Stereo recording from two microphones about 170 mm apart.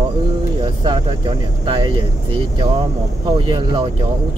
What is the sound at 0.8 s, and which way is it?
Speech, 25° right (ahead or behind).